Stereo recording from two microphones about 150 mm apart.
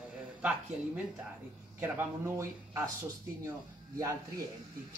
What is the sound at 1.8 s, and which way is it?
Speech, 15° right (ahead or behind).